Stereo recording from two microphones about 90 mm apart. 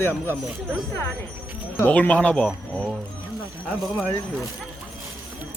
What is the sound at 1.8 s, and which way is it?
Speech, 15° left (ahead or behind).